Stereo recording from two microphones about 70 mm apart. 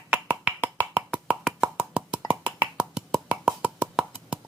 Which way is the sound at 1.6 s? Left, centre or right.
Centre.